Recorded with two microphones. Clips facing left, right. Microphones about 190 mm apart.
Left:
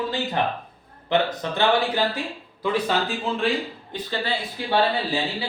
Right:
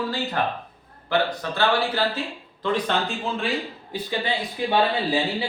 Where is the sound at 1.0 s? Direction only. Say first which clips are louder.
Left 1 dB; 20° left (ahead or behind); by 3.5 s centre (ahead or behind).